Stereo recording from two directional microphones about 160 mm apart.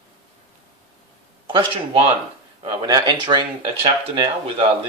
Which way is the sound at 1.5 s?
30° right (ahead or behind).